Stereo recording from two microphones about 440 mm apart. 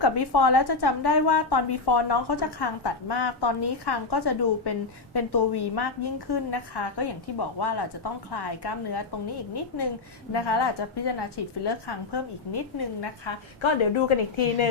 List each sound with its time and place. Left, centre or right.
0.0 s a woman's voice: left
10.3 s a woman's voice: left